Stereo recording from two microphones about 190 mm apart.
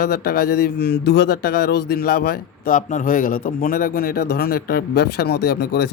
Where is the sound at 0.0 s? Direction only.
55° left (ahead or behind).